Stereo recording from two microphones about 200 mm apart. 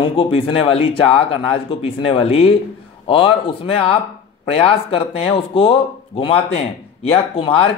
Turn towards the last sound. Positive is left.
turn(degrees=25)  # may be behind; listen again after turning